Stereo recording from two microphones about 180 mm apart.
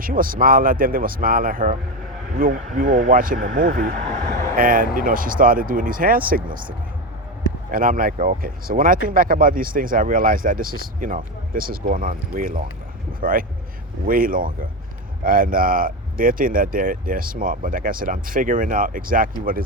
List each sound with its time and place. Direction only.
0.0 s speech: 50° right (ahead or behind)
7.7 s speech: 50° right (ahead or behind)